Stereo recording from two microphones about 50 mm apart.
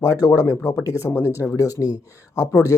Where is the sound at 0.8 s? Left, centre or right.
Left.